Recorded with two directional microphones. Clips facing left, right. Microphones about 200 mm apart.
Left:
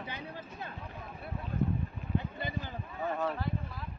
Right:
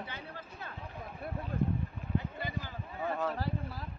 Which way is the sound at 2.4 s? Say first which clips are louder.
Left 1 dB; 20° left (ahead or behind).